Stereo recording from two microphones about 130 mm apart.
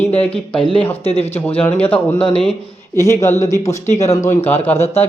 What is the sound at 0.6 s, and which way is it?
Speech, 40° left (ahead or behind).